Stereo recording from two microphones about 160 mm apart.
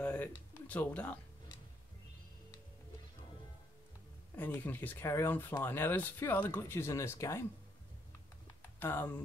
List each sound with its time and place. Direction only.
0.0 s speech: 10° left (ahead or behind)
4.5 s speech: 10° left (ahead or behind)
8.7 s speech: 10° left (ahead or behind)